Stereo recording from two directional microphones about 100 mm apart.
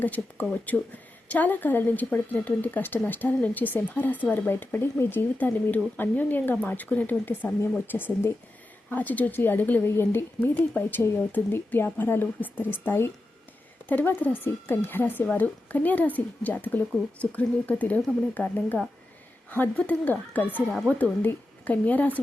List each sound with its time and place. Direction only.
0.0 s a woman's voice: 15° left (ahead or behind)